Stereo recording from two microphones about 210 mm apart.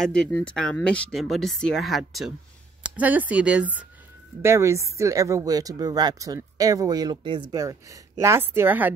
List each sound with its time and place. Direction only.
0.0 s speech: 5° left (ahead or behind)